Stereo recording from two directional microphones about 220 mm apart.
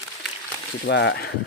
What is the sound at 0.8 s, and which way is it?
Speech, 50° left (ahead or behind).